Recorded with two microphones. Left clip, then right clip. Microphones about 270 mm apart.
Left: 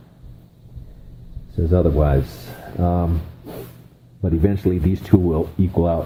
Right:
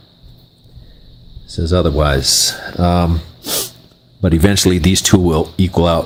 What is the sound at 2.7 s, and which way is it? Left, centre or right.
Speech, right.